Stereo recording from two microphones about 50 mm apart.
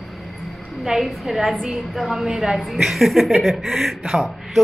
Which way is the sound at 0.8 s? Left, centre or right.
Centre.